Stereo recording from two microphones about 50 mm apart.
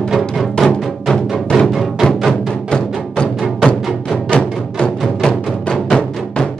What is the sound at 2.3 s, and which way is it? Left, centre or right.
Music, centre.